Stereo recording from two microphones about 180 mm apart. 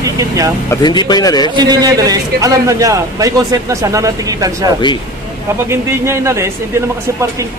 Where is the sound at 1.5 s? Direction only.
20° right (ahead or behind).